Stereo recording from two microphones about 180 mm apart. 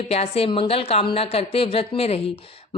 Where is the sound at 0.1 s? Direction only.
35° left (ahead or behind).